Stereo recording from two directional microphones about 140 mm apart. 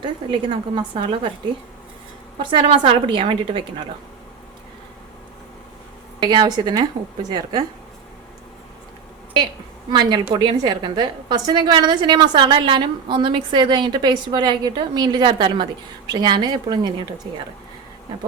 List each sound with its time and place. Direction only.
0.0 s a woman's voice: 35° right (ahead or behind)
2.4 s a woman's voice: 35° right (ahead or behind)
6.2 s a woman's voice: 30° right (ahead or behind)
9.9 s a woman's voice: 30° right (ahead or behind)